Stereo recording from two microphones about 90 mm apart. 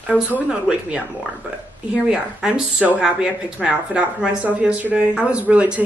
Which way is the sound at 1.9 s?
10° right (ahead or behind).